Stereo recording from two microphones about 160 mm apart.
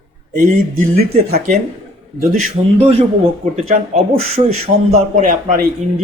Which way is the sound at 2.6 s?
35° right (ahead or behind).